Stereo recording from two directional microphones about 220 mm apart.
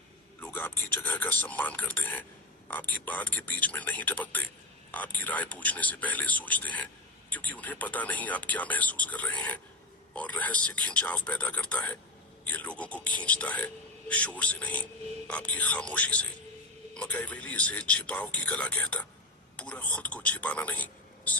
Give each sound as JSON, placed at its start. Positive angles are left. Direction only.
{"t": 0.3, "sound": "speech", "side_deg": 10}